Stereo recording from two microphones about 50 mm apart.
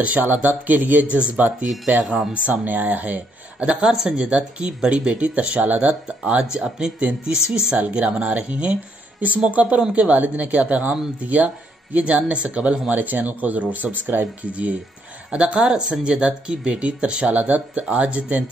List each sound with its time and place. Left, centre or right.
0.0 s a woman's voice: right
3.9 s speech: centre
4.3 s a woman's voice: right
14.5 s speech: right